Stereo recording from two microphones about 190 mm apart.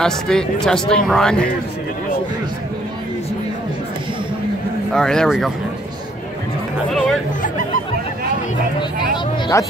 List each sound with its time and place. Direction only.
0.0 s speech: 5° left (ahead or behind)
4.9 s speech: 5° left (ahead or behind)
6.9 s speech: centre (ahead or behind)
9.5 s speech: 15° left (ahead or behind)